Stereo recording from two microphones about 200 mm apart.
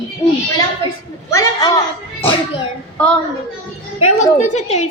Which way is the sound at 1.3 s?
15° left (ahead or behind).